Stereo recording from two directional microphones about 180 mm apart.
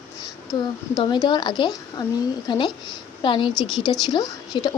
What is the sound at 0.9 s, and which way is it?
Speech, 25° left (ahead or behind).